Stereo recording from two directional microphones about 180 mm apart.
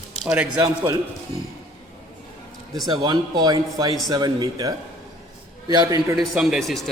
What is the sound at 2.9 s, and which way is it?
Speech, 25° right (ahead or behind).